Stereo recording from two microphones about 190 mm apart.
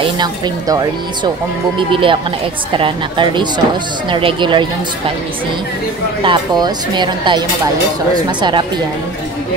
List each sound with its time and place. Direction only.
0.0 s speech: 20° right (ahead or behind)
6.2 s speech: 25° right (ahead or behind)